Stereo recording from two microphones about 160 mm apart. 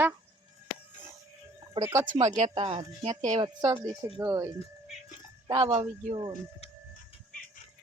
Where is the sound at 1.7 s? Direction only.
20° right (ahead or behind).